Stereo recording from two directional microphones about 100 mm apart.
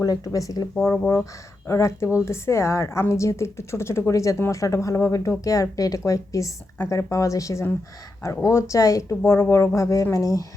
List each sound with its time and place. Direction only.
0.0 s speech: 35° left (ahead or behind)